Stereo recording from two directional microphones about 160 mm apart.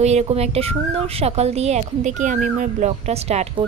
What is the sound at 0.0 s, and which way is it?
Speech, 45° right (ahead or behind).